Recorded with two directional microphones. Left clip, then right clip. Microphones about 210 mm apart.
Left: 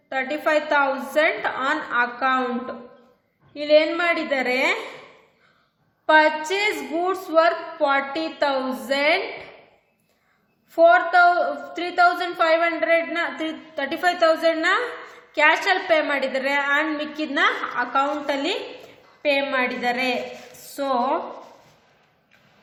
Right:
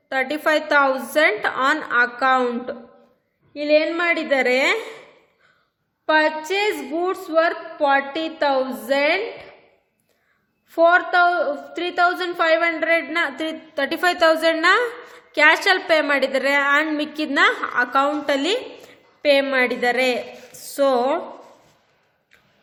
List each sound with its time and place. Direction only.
0.1 s a woman's voice: 45° right (ahead or behind)
3.5 s a woman's voice: 35° right (ahead or behind)
6.1 s a woman's voice: 35° right (ahead or behind)
10.7 s a woman's voice: 40° right (ahead or behind)